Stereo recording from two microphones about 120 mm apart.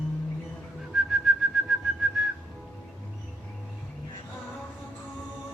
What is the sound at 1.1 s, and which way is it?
Whistling, centre (ahead or behind).